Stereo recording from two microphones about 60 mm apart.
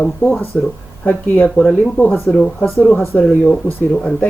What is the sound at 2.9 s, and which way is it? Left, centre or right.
Speech, left.